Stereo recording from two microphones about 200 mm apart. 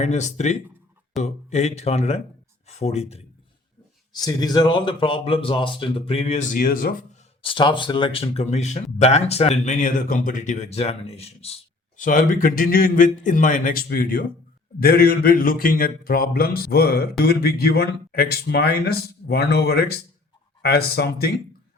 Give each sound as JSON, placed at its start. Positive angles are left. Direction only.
{"t": 0.0, "sound": "speech", "side_deg": 35}
{"t": 4.1, "sound": "speech", "side_deg": 20}
{"t": 7.4, "sound": "speech", "side_deg": 25}
{"t": 11.9, "sound": "a man's voice", "side_deg": 40}